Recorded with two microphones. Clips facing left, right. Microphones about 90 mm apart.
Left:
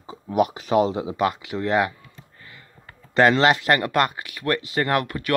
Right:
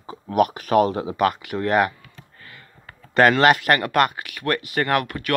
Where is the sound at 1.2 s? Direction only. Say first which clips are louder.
Right 3 dB; 50° right (ahead or behind).